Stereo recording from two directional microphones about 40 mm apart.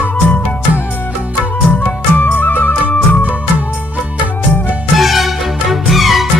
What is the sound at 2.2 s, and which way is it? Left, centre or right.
Music, left.